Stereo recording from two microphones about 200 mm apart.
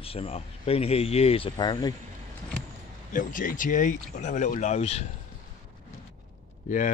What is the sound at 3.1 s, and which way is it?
Speech, 40° left (ahead or behind).